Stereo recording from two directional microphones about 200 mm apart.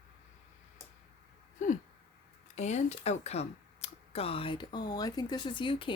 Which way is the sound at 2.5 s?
35° left (ahead or behind).